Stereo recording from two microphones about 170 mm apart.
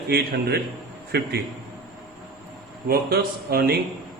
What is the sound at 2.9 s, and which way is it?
Speech, 65° right (ahead or behind).